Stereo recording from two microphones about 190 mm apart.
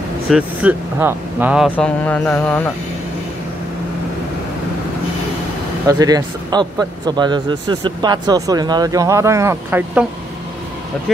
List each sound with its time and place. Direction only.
0.3 s speech: 10° right (ahead or behind); by 2.7 s 10° left (ahead or behind)
5.9 s speech: 20° right (ahead or behind)